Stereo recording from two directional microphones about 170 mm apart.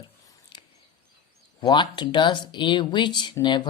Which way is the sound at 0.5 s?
30° left (ahead or behind).